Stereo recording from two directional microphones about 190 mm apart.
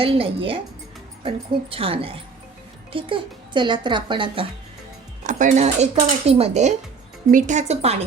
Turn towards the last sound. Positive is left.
turn(degrees=-35)  # may be behind; listen again after turning